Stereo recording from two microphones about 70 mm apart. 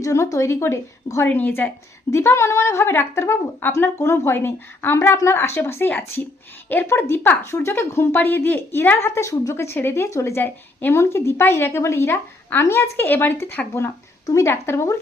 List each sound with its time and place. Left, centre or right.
0.0 s speech: left
1.2 s a woman's voice: left
10.4 s a woman's voice: left